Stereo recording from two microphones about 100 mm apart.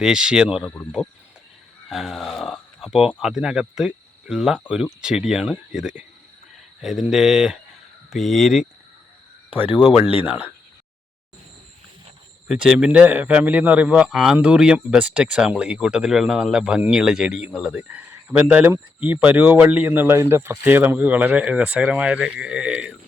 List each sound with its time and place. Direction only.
0.0 s speech: 10° right (ahead or behind)
1.9 s speech: centre (ahead or behind)
9.5 s speech: 15° right (ahead or behind)
12.5 s speech: 5° right (ahead or behind)